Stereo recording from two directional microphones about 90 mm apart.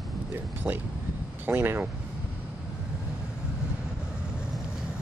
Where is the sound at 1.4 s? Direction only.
25° right (ahead or behind).